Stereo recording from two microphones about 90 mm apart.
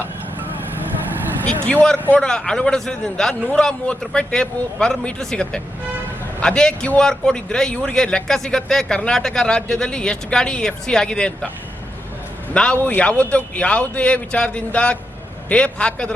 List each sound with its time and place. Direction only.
1.6 s a man's voice: 10° left (ahead or behind)
12.5 s a man's voice: 10° left (ahead or behind)